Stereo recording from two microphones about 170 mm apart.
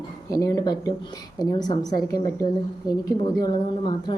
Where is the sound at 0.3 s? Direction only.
20° left (ahead or behind).